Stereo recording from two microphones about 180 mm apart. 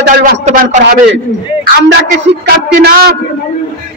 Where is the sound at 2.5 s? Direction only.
60° right (ahead or behind).